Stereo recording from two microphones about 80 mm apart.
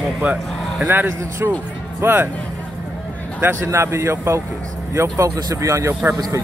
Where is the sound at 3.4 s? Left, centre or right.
Right.